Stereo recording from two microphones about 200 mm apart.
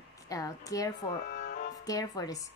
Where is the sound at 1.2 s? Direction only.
45° left (ahead or behind).